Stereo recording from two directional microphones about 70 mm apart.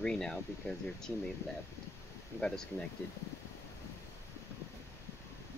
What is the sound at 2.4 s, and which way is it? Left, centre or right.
Speech, centre.